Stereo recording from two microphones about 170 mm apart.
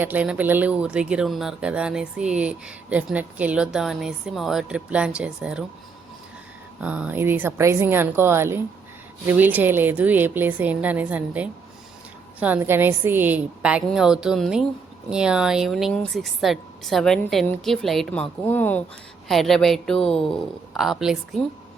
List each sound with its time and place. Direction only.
0.0 s speech: 10° right (ahead or behind)
6.8 s a woman's voice: 10° right (ahead or behind)